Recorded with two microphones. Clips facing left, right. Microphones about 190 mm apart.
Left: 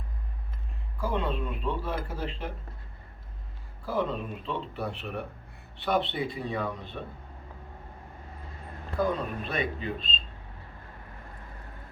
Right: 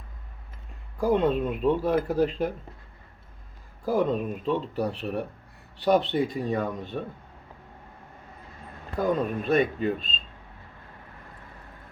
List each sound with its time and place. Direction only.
0.9 s speech: 45° right (ahead or behind)
3.8 s speech: 45° right (ahead or behind)
9.0 s speech: 45° right (ahead or behind)